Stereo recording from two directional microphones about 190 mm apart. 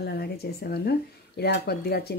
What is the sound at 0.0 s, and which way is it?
Speech, 60° left (ahead or behind).